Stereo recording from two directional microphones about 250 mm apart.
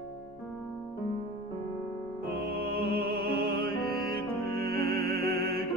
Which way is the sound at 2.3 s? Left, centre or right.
Right.